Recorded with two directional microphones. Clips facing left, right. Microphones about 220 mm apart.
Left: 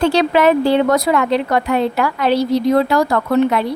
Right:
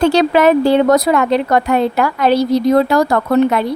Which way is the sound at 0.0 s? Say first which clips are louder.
Right 2 dB; 45° right (ahead or behind).